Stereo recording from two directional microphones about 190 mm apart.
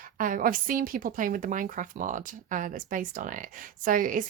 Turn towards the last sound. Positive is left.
turn(degrees=-45)  # may be behind; listen again after turning